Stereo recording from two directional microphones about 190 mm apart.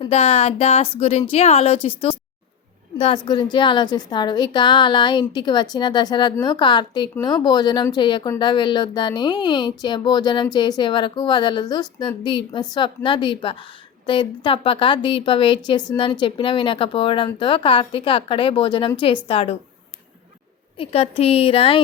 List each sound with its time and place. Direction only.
0.0 s speech: 35° left (ahead or behind)
3.2 s a woman's voice: 25° left (ahead or behind)
20.7 s a woman's voice: 30° left (ahead or behind)